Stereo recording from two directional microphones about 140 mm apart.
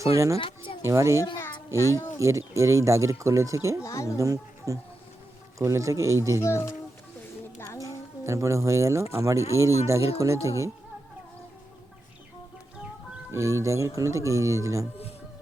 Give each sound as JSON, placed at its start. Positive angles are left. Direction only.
{"t": 0.0, "sound": "speech", "side_deg": -20}
{"t": 0.3, "sound": "speech", "side_deg": 40}
{"t": 0.8, "sound": "speech", "side_deg": -20}
{"t": 3.8, "sound": "a child's voice", "side_deg": 20}
{"t": 4.2, "sound": "speech", "side_deg": -25}
{"t": 6.4, "sound": "a child's voice", "side_deg": 20}
{"t": 8.2, "sound": "speech", "side_deg": -20}
{"t": 13.3, "sound": "speech", "side_deg": -20}